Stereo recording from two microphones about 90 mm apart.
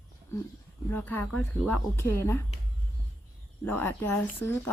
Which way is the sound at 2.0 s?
30° left (ahead or behind).